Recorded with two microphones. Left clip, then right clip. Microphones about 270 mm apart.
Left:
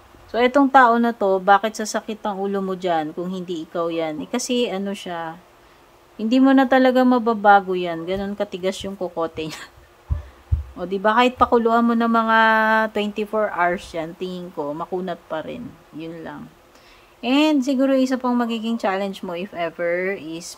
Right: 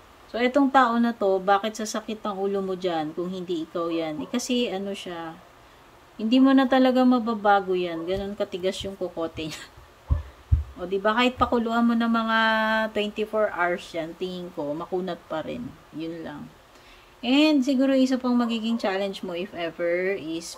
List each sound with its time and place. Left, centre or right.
0.3 s speech: centre
10.8 s speech: centre